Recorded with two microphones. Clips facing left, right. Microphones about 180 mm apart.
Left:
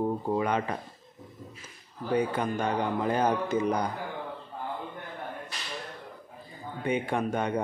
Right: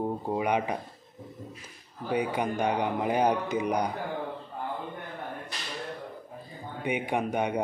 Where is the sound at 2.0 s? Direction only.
15° right (ahead or behind).